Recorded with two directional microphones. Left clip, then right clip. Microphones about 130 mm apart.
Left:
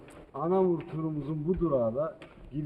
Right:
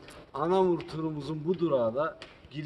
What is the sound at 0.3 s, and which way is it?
A man's voice, 40° right (ahead or behind).